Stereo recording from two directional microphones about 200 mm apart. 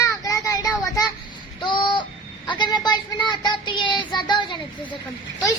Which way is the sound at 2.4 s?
20° left (ahead or behind).